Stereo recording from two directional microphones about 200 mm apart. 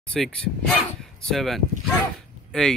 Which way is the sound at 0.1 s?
5° left (ahead or behind).